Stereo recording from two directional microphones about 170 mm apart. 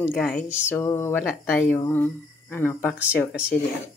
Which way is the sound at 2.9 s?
10° right (ahead or behind).